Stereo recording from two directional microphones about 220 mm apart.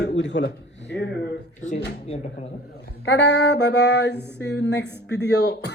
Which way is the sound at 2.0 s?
30° left (ahead or behind).